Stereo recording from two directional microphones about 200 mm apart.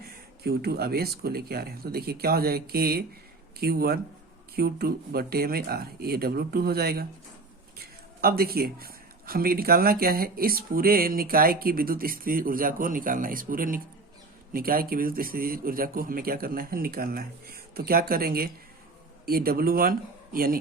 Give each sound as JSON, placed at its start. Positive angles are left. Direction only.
{"t": 0.0, "sound": "speech", "side_deg": -50}